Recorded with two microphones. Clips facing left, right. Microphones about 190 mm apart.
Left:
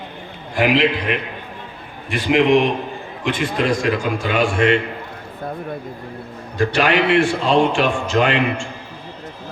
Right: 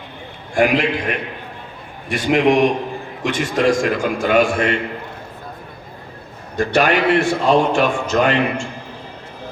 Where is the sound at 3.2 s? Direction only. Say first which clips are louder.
Right 2 dB; 45° right (ahead or behind).